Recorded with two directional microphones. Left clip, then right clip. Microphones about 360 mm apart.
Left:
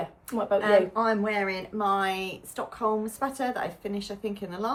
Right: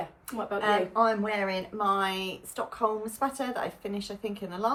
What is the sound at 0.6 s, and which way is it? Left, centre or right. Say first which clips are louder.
Speech: even; centre.